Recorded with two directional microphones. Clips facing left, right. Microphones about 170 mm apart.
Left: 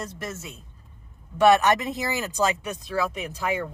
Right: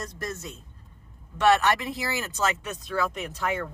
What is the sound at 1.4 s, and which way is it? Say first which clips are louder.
Speech: left 3 dB; 10° left (ahead or behind).